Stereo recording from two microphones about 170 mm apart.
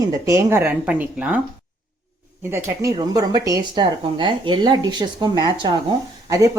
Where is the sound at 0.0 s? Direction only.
20° right (ahead or behind).